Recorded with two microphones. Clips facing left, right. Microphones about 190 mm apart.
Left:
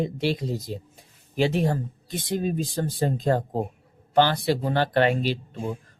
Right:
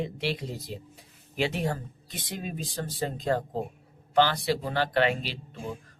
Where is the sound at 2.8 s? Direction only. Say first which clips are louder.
Left 6 dB; 45° left (ahead or behind).